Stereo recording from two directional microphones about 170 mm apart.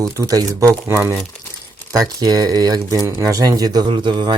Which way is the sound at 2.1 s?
20° right (ahead or behind).